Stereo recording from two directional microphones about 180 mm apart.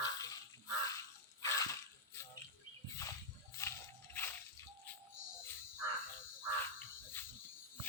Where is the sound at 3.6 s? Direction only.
15° left (ahead or behind).